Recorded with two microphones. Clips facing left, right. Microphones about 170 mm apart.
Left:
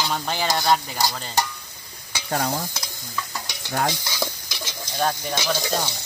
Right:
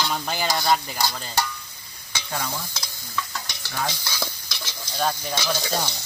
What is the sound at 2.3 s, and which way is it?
Speech, 45° left (ahead or behind).